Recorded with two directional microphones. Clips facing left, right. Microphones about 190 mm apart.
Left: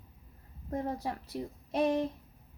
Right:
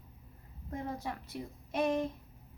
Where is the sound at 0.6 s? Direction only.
35° left (ahead or behind).